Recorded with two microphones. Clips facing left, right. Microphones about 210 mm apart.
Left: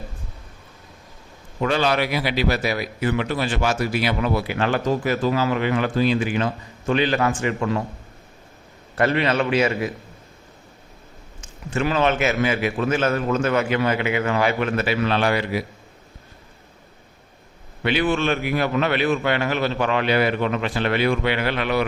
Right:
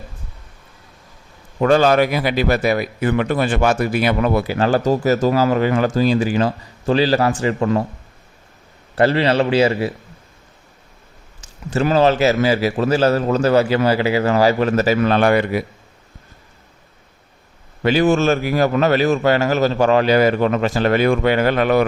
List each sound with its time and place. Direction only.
1.5 s a man's voice: 45° right (ahead or behind)
4.4 s a man's voice: 35° right (ahead or behind)
9.0 s a man's voice: 30° right (ahead or behind)
11.7 s a man's voice: 40° right (ahead or behind)
17.8 s a man's voice: 40° right (ahead or behind)